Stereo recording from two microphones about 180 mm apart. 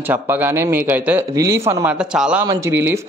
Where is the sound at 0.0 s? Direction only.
10° right (ahead or behind).